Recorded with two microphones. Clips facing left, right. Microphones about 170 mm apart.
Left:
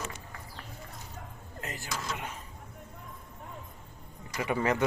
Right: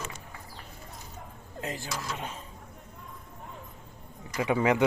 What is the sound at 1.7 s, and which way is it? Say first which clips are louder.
Speech: left 1 dB; 25° right (ahead or behind).